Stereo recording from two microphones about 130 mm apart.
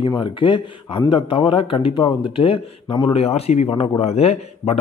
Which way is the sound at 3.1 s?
50° left (ahead or behind).